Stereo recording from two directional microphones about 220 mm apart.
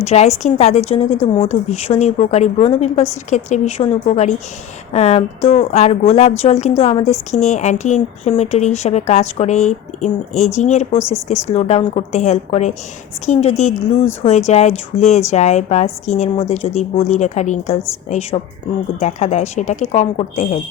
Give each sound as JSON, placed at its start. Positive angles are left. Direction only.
{"t": 0.0, "sound": "a woman's voice", "side_deg": 30}